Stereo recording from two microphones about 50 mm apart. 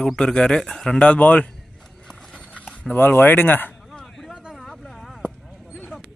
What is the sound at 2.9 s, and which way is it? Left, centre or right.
Speech, left.